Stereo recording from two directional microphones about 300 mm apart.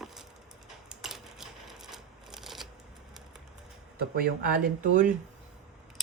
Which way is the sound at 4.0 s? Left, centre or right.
Right.